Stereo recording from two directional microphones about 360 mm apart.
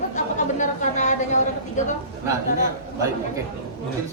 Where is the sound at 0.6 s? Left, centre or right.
Centre.